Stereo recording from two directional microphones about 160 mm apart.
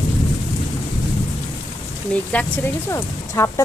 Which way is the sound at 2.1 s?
10° left (ahead or behind).